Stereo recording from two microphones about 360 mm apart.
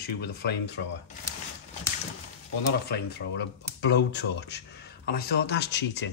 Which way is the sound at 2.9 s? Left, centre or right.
Left.